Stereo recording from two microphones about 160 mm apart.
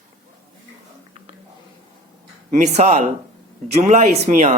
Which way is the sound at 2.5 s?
50° right (ahead or behind).